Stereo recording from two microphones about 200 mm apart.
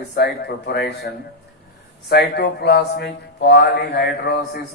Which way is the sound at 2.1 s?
55° left (ahead or behind).